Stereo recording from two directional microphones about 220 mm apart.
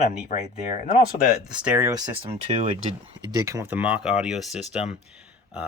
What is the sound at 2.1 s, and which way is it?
Speech, 25° right (ahead or behind).